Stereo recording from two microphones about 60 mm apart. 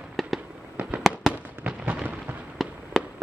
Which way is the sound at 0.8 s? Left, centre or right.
Right.